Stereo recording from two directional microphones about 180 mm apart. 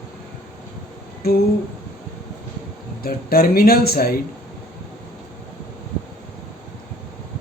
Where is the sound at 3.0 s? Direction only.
55° left (ahead or behind).